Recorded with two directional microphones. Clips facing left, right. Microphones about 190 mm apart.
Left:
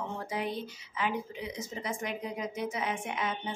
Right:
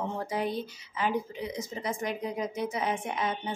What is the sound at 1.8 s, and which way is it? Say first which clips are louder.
A woman's voice: right 3 dB; 35° right (ahead or behind).